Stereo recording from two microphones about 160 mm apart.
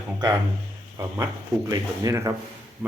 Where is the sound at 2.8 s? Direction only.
5° right (ahead or behind).